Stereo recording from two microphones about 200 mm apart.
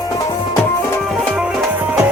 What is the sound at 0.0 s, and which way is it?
Music, 15° left (ahead or behind).